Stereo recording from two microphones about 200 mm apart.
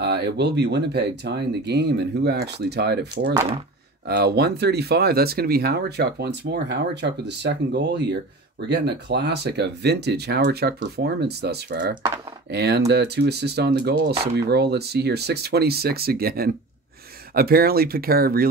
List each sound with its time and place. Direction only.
0.0 s speech: 55° right (ahead or behind)